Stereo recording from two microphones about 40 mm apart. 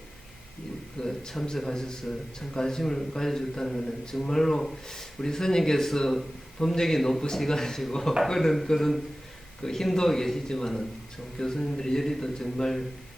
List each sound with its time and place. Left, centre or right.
0.9 s a man's voice: centre